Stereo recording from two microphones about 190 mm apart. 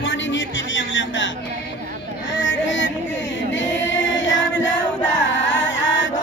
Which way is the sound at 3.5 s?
75° left (ahead or behind).